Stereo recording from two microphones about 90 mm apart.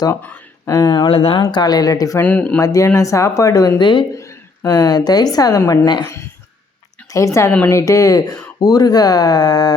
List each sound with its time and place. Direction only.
0.7 s speech: 50° left (ahead or behind); by 1.4 s 85° left
1.4 s speech: 50° left (ahead or behind)
2.1 s speech: 15° left (ahead or behind)
2.6 s speech: 40° left (ahead or behind)
3.8 s speech: 55° left (ahead or behind)
4.1 s a sound: 35° left (ahead or behind)
4.7 s speech: 50° left (ahead or behind)
5.8 s speech: 55° left (ahead or behind)
7.1 s a woman's voice: 40° left (ahead or behind)